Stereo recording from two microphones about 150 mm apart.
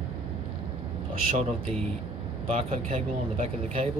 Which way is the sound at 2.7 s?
45° right (ahead or behind).